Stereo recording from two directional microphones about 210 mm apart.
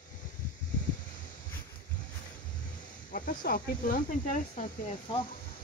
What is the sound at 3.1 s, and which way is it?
Speech, 40° left (ahead or behind).